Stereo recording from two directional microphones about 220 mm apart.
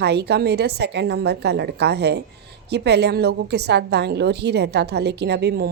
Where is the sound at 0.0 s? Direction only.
50° right (ahead or behind).